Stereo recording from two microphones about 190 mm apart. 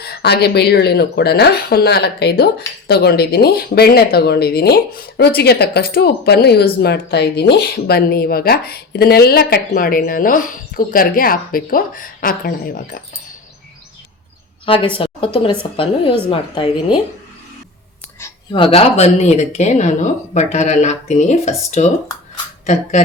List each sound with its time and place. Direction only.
0.0 s speech: 55° left (ahead or behind)
14.7 s a woman's voice: 25° left (ahead or behind)
18.5 s speech: 30° left (ahead or behind)